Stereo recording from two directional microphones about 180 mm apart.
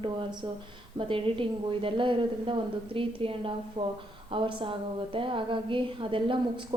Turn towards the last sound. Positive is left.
turn(degrees=-30)  # may be behind; listen again after turning